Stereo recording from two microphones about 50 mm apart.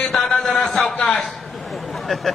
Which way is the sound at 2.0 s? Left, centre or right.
Centre.